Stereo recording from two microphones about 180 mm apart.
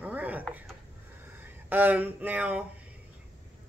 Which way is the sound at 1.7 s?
10° right (ahead or behind).